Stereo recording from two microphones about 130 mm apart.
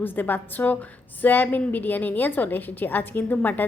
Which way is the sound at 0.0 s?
15° left (ahead or behind).